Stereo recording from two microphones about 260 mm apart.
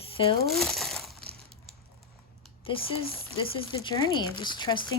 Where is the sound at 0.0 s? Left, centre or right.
Left.